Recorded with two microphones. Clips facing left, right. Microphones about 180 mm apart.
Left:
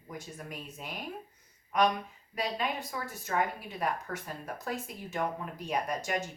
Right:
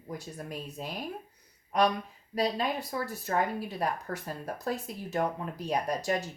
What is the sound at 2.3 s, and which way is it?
Speech, 35° right (ahead or behind).